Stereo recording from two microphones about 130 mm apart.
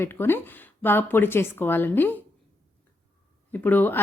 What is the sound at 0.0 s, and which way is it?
A woman's voice, 15° left (ahead or behind).